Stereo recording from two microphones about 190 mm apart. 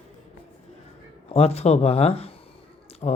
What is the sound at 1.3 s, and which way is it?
Speech, 30° left (ahead or behind).